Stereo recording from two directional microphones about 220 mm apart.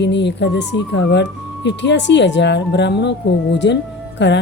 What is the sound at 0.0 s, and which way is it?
A woman's voice, 55° left (ahead or behind).